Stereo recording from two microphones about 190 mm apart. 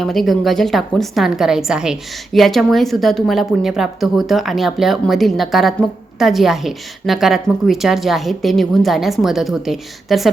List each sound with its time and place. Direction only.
0.0 s a woman's voice: centre (ahead or behind)